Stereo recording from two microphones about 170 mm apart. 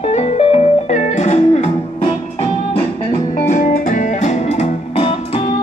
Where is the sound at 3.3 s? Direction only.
50° left (ahead or behind); by 5.6 s 35° left (ahead or behind).